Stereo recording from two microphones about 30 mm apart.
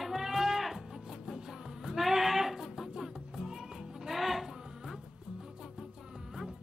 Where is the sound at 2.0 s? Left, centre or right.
Centre.